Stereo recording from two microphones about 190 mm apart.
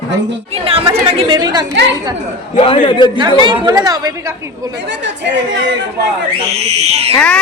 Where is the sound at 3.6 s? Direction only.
20° right (ahead or behind).